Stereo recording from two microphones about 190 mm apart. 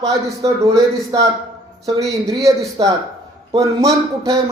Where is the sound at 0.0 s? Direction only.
15° right (ahead or behind).